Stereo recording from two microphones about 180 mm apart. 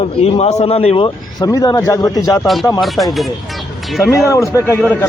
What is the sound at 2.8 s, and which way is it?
Speech, centre (ahead or behind).